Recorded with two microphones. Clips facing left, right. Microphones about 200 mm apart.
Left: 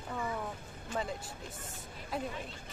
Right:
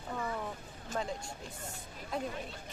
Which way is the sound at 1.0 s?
5° left (ahead or behind).